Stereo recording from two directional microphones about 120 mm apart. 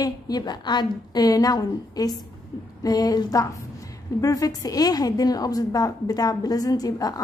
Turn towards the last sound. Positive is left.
turn(degrees=30)  # may be behind; listen again after turning